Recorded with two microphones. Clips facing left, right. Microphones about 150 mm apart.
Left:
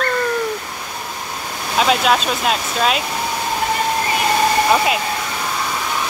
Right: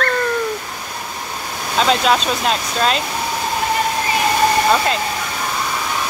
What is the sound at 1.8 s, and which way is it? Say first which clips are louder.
Speech: even; 5° left (ahead or behind).